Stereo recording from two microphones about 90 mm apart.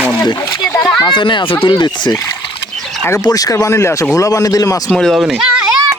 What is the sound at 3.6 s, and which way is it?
A man's voice, 30° left (ahead or behind).